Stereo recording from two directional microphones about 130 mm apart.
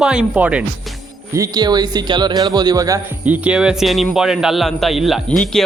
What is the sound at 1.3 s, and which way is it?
Speech, 30° right (ahead or behind).